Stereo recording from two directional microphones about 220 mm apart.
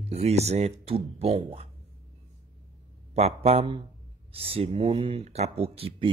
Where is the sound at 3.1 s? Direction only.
30° right (ahead or behind).